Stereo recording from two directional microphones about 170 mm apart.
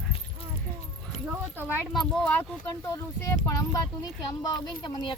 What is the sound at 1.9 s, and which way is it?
Speech, centre (ahead or behind).